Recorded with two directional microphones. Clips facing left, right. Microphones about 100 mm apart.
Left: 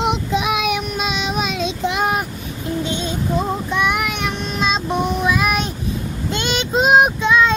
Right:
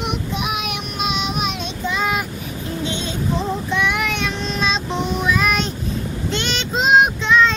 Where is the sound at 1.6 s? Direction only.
90° left.